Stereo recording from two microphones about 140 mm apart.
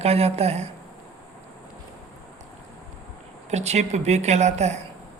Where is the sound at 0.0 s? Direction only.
50° right (ahead or behind).